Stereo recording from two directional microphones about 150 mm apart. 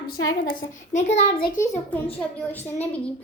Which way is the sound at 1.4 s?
60° left (ahead or behind).